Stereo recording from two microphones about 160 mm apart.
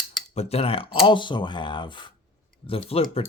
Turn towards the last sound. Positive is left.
turn(degrees=40)  # may be behind; listen again after turning